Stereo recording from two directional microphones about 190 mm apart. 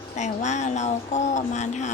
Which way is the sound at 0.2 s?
40° left (ahead or behind).